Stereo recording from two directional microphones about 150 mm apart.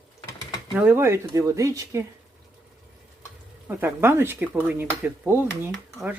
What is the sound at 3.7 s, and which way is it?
Speech, 15° right (ahead or behind).